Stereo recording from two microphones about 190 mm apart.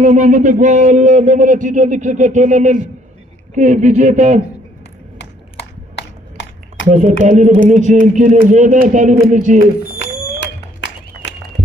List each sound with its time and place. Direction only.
0.0 s speech: 40° right (ahead or behind)
6.9 s speech: 40° right (ahead or behind)